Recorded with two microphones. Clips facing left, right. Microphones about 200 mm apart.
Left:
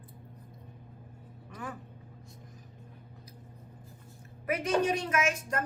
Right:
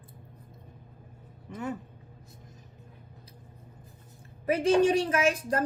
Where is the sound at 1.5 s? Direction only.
25° right (ahead or behind).